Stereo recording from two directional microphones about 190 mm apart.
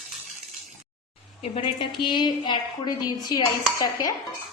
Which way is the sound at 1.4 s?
25° left (ahead or behind).